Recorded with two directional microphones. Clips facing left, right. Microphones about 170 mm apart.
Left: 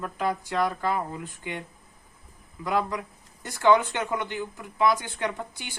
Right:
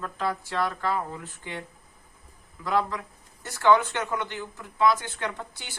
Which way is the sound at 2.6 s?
15° left (ahead or behind).